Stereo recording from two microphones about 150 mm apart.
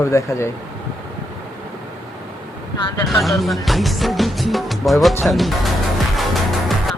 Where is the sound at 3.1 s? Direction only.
Centre (ahead or behind).